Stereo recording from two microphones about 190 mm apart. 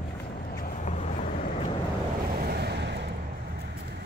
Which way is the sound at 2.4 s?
55° right (ahead or behind).